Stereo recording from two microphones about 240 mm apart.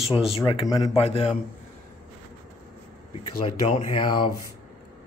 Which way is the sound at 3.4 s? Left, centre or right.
Left.